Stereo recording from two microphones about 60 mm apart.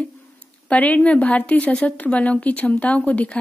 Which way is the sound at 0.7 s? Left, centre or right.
Left.